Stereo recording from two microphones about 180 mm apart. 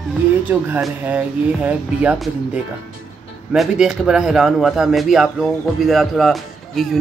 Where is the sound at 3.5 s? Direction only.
5° right (ahead or behind).